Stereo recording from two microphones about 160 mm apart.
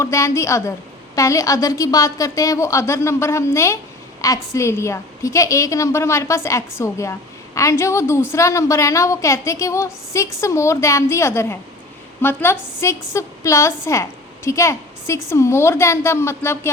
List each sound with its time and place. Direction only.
0.0 s a woman's voice: 20° left (ahead or behind)